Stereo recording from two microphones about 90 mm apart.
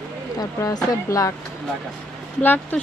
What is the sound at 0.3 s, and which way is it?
Speech, 45° left (ahead or behind).